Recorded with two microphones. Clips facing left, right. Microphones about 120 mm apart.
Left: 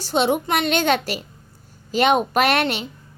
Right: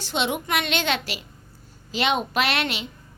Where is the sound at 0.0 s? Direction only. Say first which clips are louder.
Left 6 dB; 40° left (ahead or behind).